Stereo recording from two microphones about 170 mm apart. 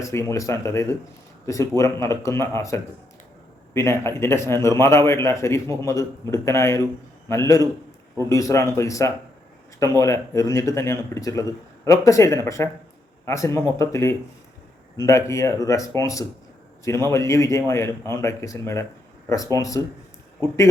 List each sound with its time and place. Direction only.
0.0 s speech: 15° left (ahead or behind)